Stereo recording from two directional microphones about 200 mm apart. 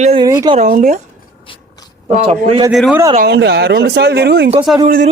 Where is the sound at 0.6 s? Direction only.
40° right (ahead or behind).